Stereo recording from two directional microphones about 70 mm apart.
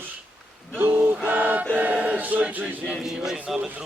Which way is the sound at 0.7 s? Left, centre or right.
Right.